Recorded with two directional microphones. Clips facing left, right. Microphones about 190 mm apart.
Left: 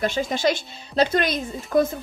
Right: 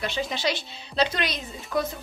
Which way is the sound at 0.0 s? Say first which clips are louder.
Left 6 dB; 45° left (ahead or behind).